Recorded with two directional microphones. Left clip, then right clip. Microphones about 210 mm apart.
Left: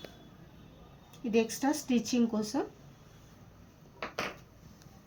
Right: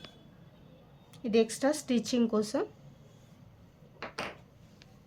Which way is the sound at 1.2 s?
50° right (ahead or behind).